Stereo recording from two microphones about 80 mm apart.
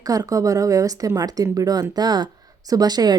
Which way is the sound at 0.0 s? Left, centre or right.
Right.